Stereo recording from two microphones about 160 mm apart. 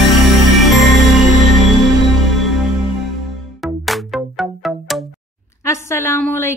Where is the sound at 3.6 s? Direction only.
Centre (ahead or behind).